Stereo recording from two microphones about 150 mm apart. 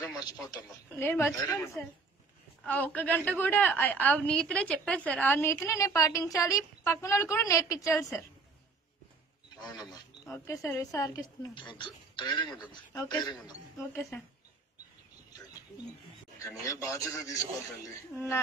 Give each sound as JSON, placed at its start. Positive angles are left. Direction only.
{"t": 0.0, "sound": "a woman's voice", "side_deg": 25}
{"t": 10.2, "sound": "speech", "side_deg": 20}
{"t": 16.6, "sound": "a woman's voice", "side_deg": 20}